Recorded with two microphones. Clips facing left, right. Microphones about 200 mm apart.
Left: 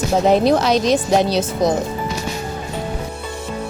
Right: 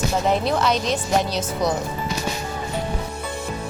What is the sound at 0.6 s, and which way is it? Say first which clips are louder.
Speech: left 6 dB; 90° left.